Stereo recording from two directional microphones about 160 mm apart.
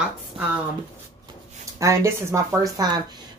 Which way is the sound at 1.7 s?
20° right (ahead or behind).